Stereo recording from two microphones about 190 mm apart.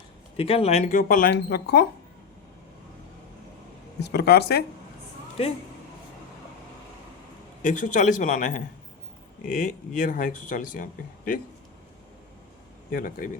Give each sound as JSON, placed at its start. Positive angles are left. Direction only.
{"t": 0.3, "sound": "speech", "side_deg": 30}
{"t": 1.3, "sound": "speech", "side_deg": 55}
{"t": 4.0, "sound": "speech", "side_deg": 60}
{"t": 7.6, "sound": "speech", "side_deg": 40}
{"t": 12.9, "sound": "speech", "side_deg": 45}